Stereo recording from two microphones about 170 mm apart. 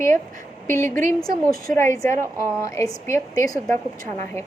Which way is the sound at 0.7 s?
15° left (ahead or behind).